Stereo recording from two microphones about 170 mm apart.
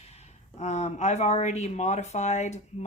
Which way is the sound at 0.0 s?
40° left (ahead or behind).